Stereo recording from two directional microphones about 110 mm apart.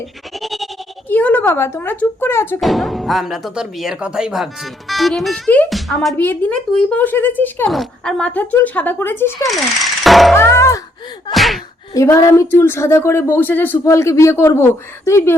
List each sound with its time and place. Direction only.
0.3 s music: centre (ahead or behind)
1.0 s speech: 15° left (ahead or behind)
2.6 s speech: centre (ahead or behind)
6.1 s speech: 15° left (ahead or behind)
7.7 s speech: centre (ahead or behind)
8.2 s speech: 15° left (ahead or behind)
10.0 s music: centre (ahead or behind)
10.3 s music: 25° left (ahead or behind)
11.3 s gasp: centre (ahead or behind)
11.9 s speech: 25° left (ahead or behind)